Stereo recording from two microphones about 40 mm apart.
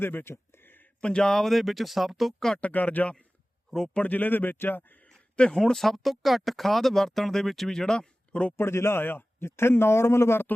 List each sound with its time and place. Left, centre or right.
0.0 s speech: left
1.0 s a man's voice: left
1.3 s speech: centre
2.6 s speech: left
3.7 s a man's voice: centre
4.0 s speech: left
4.8 s speech: left
5.0 s a sound: left
5.5 s speech: centre
8.5 s a man's voice: left